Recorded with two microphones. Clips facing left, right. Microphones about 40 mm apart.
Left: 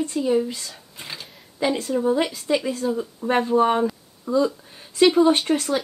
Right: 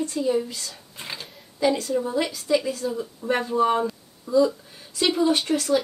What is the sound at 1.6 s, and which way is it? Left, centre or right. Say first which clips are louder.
Speech: even; left.